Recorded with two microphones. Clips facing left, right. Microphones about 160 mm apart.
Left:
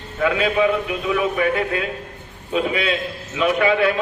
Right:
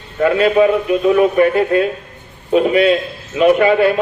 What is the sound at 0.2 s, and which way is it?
A man's voice, 45° right (ahead or behind).